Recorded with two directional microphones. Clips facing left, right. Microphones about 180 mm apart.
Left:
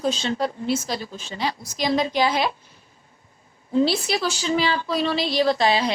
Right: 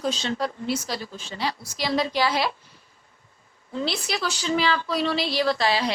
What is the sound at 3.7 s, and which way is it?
A woman's voice, 25° left (ahead or behind).